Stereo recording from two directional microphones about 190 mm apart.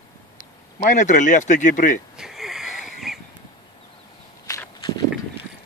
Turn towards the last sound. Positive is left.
turn(degrees=20)  # may be behind; listen again after turning